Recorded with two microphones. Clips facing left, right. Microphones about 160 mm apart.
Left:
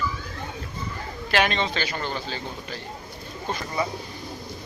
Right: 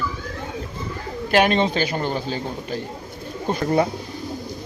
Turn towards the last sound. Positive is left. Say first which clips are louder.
# right 8 dB
turn(degrees=-60)  # may be behind; listen again after turning